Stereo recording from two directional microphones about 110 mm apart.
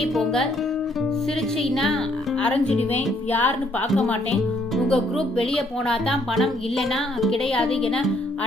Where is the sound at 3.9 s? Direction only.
Centre (ahead or behind).